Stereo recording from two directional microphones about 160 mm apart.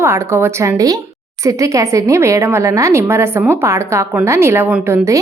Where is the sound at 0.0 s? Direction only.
15° right (ahead or behind).